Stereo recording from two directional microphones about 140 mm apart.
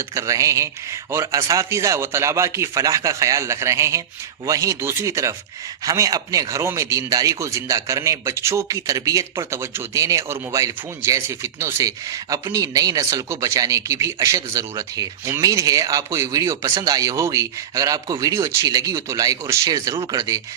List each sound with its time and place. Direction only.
0.1 s speech: 25° right (ahead or behind)